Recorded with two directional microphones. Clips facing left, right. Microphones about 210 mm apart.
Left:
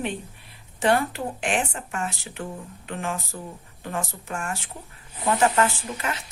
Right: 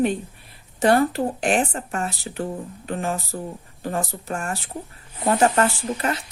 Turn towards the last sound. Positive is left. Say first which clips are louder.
# right 6 dB
turn(degrees=-40)  # may be behind; listen again after turning